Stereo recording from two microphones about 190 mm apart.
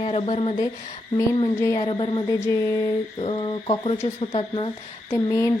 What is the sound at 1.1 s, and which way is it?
Speech, 15° left (ahead or behind).